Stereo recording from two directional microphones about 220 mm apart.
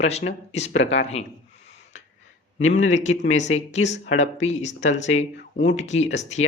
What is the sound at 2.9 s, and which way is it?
Speech, 30° left (ahead or behind).